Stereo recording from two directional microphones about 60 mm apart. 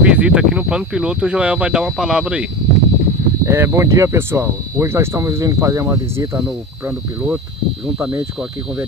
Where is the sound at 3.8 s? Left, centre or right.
Right.